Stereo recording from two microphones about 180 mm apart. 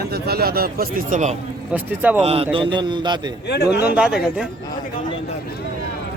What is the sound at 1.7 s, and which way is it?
Speech, 10° right (ahead or behind).